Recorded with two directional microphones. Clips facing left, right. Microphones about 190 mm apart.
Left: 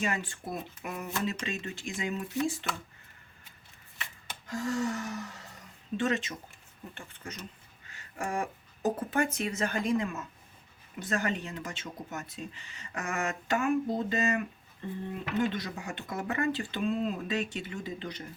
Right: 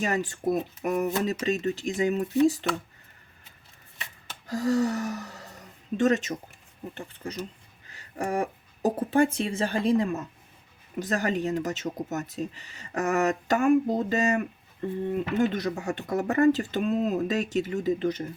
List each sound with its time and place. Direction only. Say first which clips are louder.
0.0 s speech: right 7 dB; 40° right (ahead or behind)
4.4 s speech: right 7 dB; 40° right (ahead or behind)